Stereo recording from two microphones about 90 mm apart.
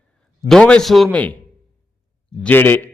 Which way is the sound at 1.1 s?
15° left (ahead or behind).